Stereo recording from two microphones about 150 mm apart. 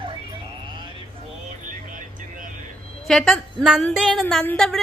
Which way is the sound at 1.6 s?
60° right (ahead or behind).